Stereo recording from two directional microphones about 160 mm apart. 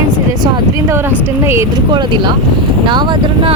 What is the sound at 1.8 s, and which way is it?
Speech, 30° right (ahead or behind).